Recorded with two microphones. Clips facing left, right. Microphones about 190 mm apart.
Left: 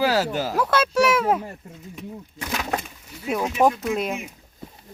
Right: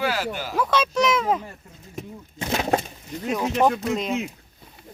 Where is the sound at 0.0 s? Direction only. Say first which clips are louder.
Left 5 dB; 40° left (ahead or behind).